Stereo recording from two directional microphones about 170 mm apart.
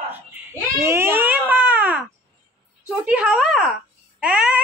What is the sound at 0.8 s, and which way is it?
A woman's voice, 15° right (ahead or behind).